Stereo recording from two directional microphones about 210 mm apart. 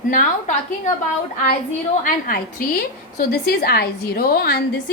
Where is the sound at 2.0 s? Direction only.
40° left (ahead or behind).